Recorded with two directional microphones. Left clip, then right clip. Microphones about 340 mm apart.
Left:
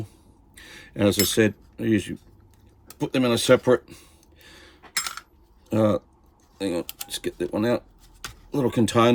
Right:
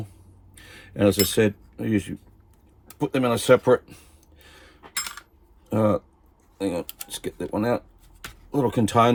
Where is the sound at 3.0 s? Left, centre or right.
Centre.